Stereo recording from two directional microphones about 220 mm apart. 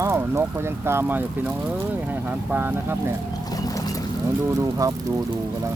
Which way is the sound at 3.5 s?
15° left (ahead or behind).